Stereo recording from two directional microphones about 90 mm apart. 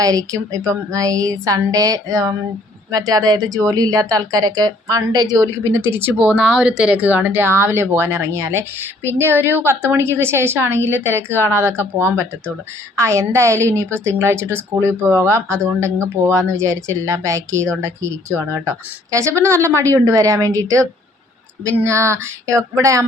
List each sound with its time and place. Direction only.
0.0 s speech: 40° right (ahead or behind)
21.8 s speech: 35° right (ahead or behind)